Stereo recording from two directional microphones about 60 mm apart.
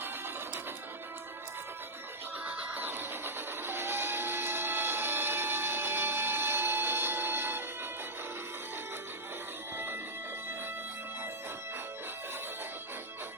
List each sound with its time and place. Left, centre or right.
2.4 s music: right
9.7 s music: right